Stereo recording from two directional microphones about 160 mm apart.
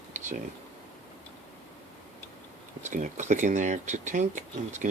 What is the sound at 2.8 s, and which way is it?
Speech, 50° right (ahead or behind).